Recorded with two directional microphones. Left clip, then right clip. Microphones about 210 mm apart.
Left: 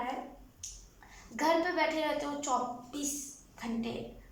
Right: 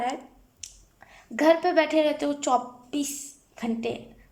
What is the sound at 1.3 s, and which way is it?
A woman's voice, 50° right (ahead or behind).